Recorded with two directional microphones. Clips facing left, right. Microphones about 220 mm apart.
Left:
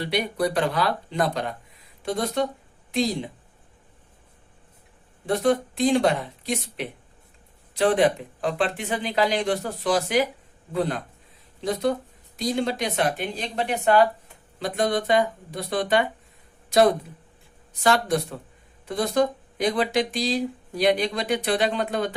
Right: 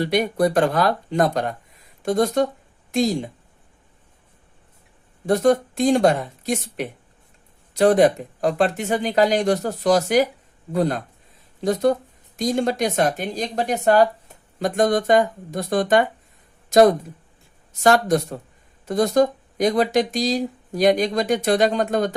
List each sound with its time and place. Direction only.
0.0 s speech: 45° right (ahead or behind)
5.2 s speech: 45° right (ahead or behind)